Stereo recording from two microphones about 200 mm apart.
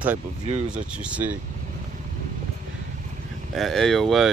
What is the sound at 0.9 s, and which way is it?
Speech, 5° right (ahead or behind).